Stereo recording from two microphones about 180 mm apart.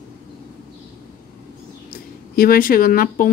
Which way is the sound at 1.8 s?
55° left (ahead or behind).